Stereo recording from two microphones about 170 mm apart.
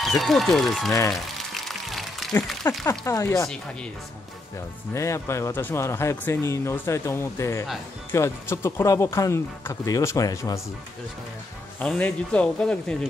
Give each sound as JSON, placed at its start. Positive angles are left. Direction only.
{"t": 0.0, "sound": "a man's voice", "side_deg": 0}
{"t": 1.5, "sound": "music", "side_deg": 0}
{"t": 2.6, "sound": "speech", "side_deg": 20}
{"t": 4.9, "sound": "speech", "side_deg": 15}
{"t": 11.8, "sound": "speech", "side_deg": 5}